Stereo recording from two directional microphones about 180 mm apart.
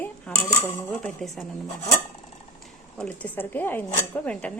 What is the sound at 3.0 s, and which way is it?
Speech, 5° left (ahead or behind).